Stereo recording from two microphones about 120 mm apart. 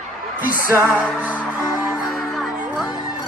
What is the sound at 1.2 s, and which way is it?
Music, 15° right (ahead or behind).